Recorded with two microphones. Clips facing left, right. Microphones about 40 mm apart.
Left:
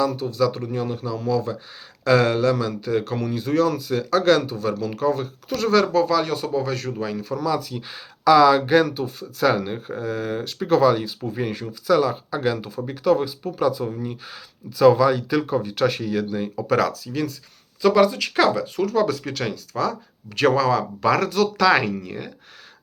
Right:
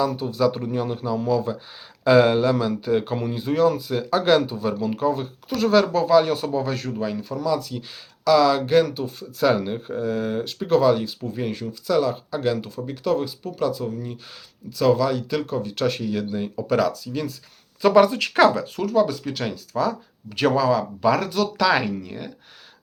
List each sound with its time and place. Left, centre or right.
0.0 s a man's voice: centre
5.9 s speech: centre
17.8 s speech: right
18.9 s speech: centre
21.9 s speech: centre